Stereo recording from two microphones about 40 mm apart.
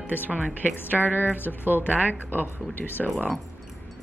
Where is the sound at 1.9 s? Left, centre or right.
Right.